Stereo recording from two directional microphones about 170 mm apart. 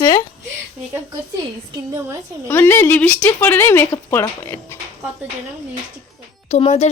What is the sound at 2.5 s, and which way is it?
A woman's voice, 10° left (ahead or behind).